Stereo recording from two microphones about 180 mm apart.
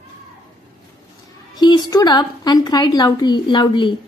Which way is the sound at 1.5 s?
25° left (ahead or behind).